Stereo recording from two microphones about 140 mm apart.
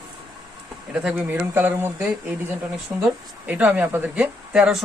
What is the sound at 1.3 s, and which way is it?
Speech, 15° right (ahead or behind).